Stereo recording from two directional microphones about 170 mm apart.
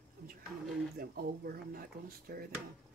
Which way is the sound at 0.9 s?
60° right (ahead or behind).